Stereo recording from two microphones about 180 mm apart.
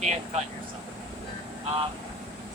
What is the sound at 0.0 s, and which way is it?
Speech, 40° right (ahead or behind).